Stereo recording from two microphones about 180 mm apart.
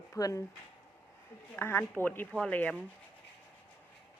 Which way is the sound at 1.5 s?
10° left (ahead or behind).